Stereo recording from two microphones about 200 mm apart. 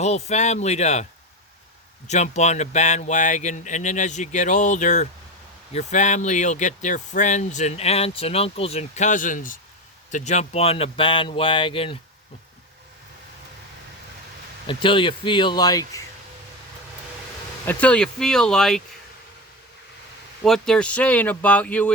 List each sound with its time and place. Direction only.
0.0 s speech: 35° left (ahead or behind)
2.0 s a man's voice: 35° left (ahead or behind)
14.7 s a man's voice: 25° left (ahead or behind)
17.7 s speech: 5° left (ahead or behind)
20.4 s speech: 5° left (ahead or behind)